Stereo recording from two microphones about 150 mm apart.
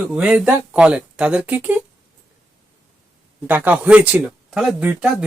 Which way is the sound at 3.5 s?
10° right (ahead or behind).